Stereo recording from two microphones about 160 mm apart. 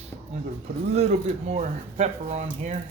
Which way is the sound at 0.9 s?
45° right (ahead or behind).